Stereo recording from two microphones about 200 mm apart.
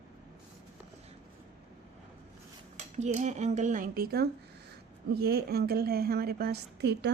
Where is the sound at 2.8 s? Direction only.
35° right (ahead or behind).